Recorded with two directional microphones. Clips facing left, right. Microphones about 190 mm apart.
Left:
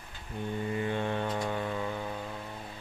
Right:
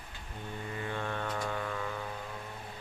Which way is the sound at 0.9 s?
20° left (ahead or behind).